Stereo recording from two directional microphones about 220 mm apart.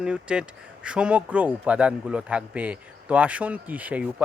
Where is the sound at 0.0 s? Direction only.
5° right (ahead or behind).